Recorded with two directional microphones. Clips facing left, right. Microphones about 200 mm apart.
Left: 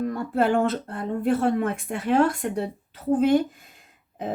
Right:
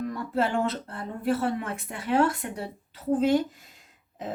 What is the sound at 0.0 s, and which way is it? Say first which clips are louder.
A woman's voice: left 4 dB; 55° left (ahead or behind).